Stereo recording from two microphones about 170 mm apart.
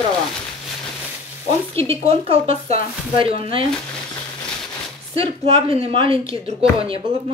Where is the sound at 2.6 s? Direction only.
35° right (ahead or behind).